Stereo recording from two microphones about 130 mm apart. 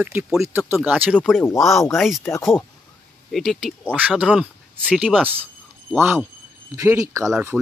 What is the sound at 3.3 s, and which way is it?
Speech, centre (ahead or behind).